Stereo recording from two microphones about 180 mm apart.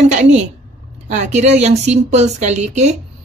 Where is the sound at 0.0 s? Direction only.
40° right (ahead or behind).